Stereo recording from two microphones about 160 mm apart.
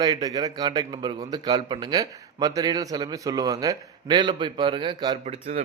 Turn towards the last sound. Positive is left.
turn(degrees=-45)  # may be behind; listen again after turning